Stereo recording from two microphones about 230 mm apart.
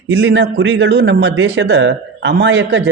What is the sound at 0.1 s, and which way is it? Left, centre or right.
Speech, right.